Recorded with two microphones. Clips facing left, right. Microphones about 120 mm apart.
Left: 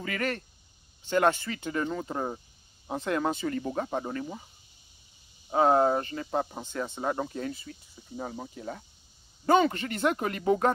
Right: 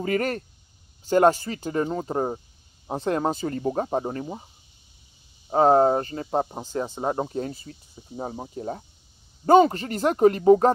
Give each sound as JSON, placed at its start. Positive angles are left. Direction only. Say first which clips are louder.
{"t": 0.0, "sound": "speech", "louder": "right 7 dB", "side_deg": -40}
{"t": 5.5, "sound": "speech", "louder": "right 5 dB", "side_deg": -35}